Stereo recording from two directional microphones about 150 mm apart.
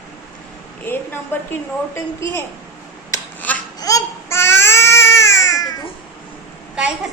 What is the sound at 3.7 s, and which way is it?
Baby cry, 25° left (ahead or behind).